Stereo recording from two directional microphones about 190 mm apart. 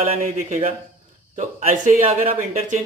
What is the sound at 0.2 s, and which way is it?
A man's voice, 35° right (ahead or behind).